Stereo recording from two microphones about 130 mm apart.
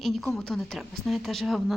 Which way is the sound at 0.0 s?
Centre (ahead or behind).